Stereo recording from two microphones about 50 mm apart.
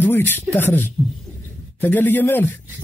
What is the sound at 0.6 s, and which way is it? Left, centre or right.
A man's voice, left.